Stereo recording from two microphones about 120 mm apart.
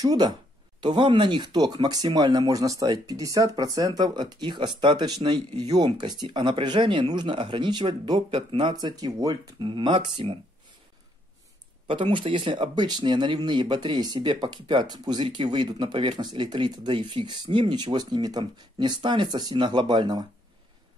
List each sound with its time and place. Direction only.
0.0 s speech: 30° right (ahead or behind)
0.7 s speech: 40° right (ahead or behind)
11.9 s speech: 45° right (ahead or behind)
12.7 s speech: 35° right (ahead or behind)